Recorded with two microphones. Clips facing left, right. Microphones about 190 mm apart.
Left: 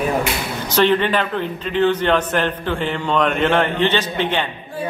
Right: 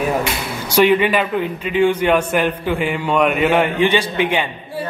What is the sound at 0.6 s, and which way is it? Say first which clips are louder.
A man's voice: right 3 dB; 10° right (ahead or behind).